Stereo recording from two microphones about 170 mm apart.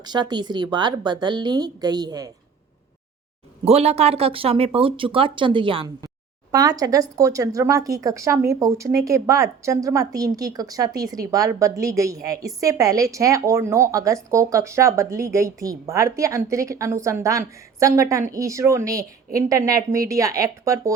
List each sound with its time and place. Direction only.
0.0 s speech: 25° right (ahead or behind)
3.6 s speech: 35° right (ahead or behind); by 20.9 s 20° right (ahead or behind)